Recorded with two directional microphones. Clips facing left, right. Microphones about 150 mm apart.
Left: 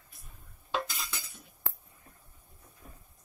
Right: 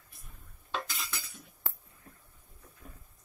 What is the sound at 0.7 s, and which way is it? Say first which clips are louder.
Cutlery: left 3 dB; 15° left (ahead or behind).